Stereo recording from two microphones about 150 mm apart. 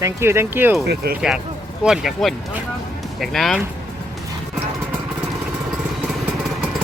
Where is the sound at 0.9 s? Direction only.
90° right.